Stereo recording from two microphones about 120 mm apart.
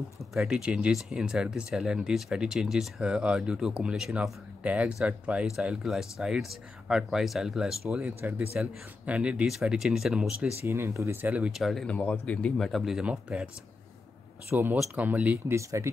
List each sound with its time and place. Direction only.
0.3 s speech: 5° right (ahead or behind)
8.2 s speech: 15° right (ahead or behind)
10.6 s speech: 20° right (ahead or behind)
14.5 s speech: 15° right (ahead or behind)
15.3 s speech: 25° right (ahead or behind)